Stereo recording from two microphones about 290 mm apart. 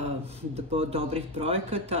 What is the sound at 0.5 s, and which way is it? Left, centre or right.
Speech, centre.